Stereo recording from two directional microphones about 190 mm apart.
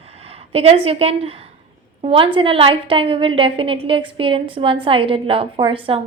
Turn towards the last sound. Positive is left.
turn(degrees=-30)  # may be behind; listen again after turning